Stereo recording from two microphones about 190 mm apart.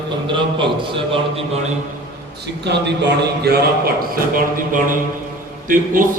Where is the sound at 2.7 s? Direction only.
60° right (ahead or behind).